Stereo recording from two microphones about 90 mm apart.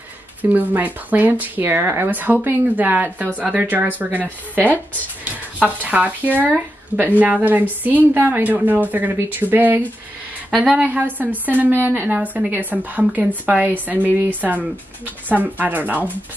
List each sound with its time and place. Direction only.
0.4 s a woman's voice: 20° right (ahead or behind)